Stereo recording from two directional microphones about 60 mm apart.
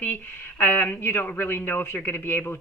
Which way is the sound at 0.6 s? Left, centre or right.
Left.